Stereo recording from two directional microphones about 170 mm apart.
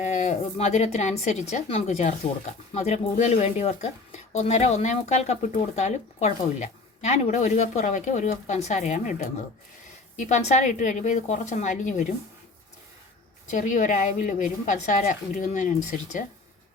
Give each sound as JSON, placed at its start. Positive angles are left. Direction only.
{"t": 0.0, "sound": "speech", "side_deg": 45}
{"t": 13.5, "sound": "speech", "side_deg": 50}